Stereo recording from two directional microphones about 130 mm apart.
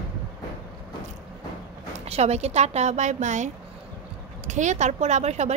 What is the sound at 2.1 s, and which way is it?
A woman's voice, 55° right (ahead or behind).